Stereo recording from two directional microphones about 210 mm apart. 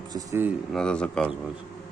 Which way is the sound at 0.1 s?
15° right (ahead or behind).